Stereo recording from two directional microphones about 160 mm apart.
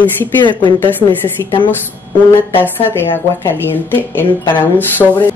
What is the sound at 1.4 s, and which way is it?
Speech, 30° left (ahead or behind).